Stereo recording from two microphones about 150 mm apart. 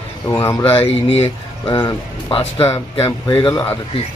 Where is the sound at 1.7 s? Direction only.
30° left (ahead or behind).